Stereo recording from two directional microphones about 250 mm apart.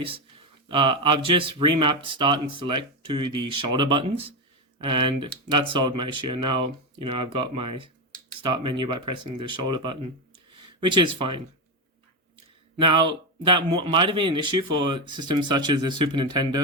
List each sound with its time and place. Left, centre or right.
0.0 s speech: right
12.8 s speech: centre